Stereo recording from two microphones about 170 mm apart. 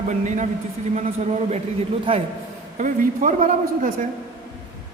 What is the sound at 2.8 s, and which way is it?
A man's voice, 50° right (ahead or behind).